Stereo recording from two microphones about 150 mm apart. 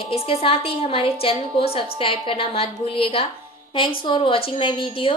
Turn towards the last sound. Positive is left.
turn(degrees=35)  # may be behind; listen again after turning